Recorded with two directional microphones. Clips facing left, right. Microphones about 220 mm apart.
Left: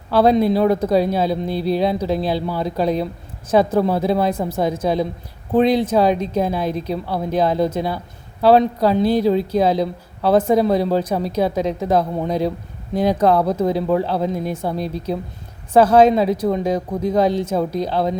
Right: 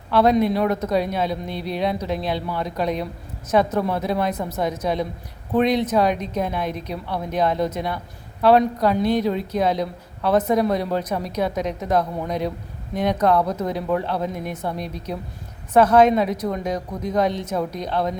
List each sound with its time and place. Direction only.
0.1 s a man's voice: 30° left (ahead or behind)